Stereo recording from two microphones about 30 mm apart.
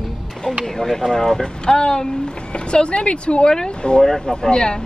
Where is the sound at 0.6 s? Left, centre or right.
Centre.